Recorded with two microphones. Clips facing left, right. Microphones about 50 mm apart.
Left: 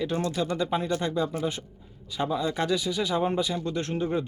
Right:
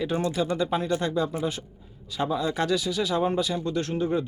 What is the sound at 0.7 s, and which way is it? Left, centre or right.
A man's voice, centre.